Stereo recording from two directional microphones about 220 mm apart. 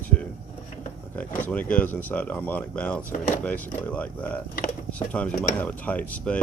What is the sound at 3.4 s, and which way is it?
Speech, 5° left (ahead or behind).